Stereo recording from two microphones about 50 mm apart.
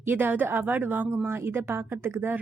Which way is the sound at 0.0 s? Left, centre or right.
Right.